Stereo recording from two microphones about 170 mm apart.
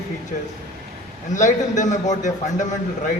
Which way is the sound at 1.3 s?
50° left (ahead or behind).